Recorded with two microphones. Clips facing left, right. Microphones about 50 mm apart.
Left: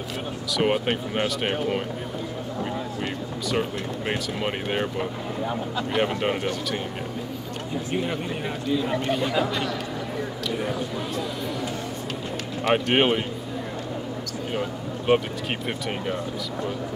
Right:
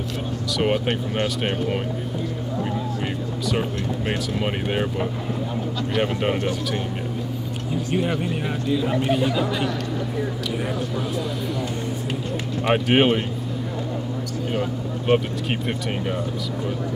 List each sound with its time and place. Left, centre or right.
0.6 s speech: centre
4.1 s speech: centre
7.9 s speech: centre
10.6 s speech: centre
12.6 s speech: centre
14.5 s a sound: centre